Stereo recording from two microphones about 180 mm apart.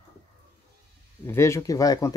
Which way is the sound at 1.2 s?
15° left (ahead or behind).